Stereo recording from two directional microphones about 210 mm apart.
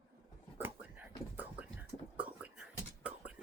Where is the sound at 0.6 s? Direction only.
10° right (ahead or behind).